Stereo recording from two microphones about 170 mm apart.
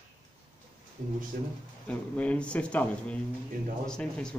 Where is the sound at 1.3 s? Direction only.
65° right (ahead or behind).